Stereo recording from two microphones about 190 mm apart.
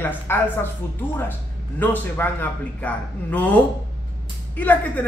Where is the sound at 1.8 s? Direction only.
10° left (ahead or behind).